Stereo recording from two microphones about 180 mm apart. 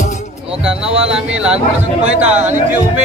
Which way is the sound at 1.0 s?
5° right (ahead or behind).